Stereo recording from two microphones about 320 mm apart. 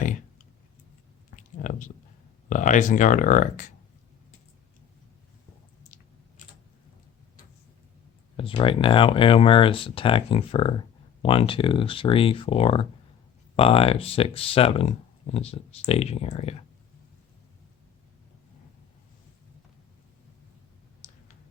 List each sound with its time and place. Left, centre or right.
1.4 s a sound: left
2.5 s speech: left
8.4 s speech: centre